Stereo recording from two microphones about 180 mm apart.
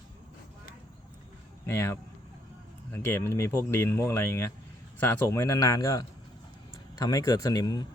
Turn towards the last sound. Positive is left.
turn(degrees=20)  # may be behind; listen again after turning